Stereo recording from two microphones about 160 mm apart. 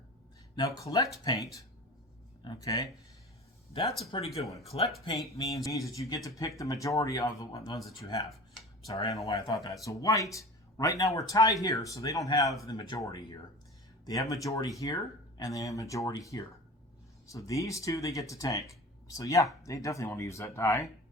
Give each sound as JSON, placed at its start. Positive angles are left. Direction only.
{"t": 0.5, "sound": "speech", "side_deg": 25}
{"t": 3.7, "sound": "speech", "side_deg": 35}
{"t": 5.3, "sound": "speech", "side_deg": 20}
{"t": 9.0, "sound": "speech", "side_deg": 25}
{"t": 14.0, "sound": "speech", "side_deg": 20}